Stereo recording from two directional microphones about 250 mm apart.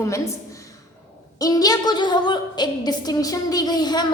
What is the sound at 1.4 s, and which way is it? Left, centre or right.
A woman's voice, centre.